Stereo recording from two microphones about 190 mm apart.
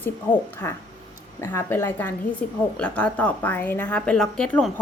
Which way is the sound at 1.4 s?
10° left (ahead or behind).